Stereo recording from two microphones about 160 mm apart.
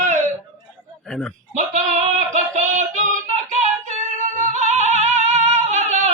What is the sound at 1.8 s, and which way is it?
Female singing, 50° right (ahead or behind).